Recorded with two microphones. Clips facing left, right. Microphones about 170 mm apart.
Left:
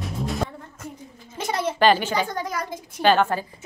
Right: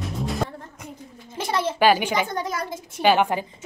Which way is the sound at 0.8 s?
15° right (ahead or behind).